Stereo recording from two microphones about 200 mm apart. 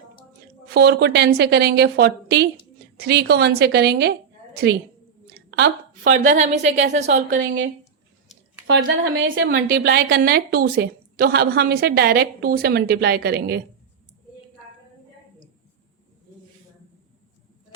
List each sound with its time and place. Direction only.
0.7 s a woman's voice: 55° right (ahead or behind)
5.5 s a sound: 60° right (ahead or behind)
6.0 s a woman's voice: 40° right (ahead or behind)
7.3 s a woman's voice: 70° right (ahead or behind)
9.2 s a woman's voice: 70° right (ahead or behind)
9.5 s a woman's voice: 45° right (ahead or behind)